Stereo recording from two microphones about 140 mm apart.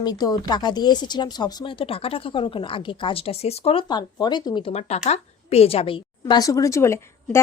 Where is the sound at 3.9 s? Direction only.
30° left (ahead or behind).